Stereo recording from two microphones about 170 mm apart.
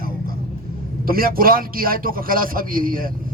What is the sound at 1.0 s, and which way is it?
A man's voice, 60° right (ahead or behind).